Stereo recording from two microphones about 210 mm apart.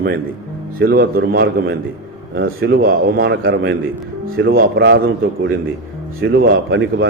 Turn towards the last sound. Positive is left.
turn(degrees=-55)  # may be behind; listen again after turning